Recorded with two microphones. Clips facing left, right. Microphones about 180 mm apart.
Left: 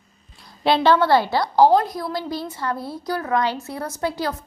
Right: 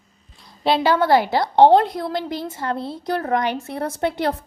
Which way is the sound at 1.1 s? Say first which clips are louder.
Right 1 dB; 20° right (ahead or behind).